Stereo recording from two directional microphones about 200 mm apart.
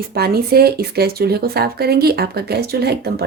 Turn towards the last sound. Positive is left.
turn(degrees=-55)  # may be behind; listen again after turning